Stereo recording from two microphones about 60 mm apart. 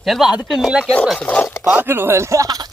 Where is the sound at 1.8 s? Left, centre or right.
Right.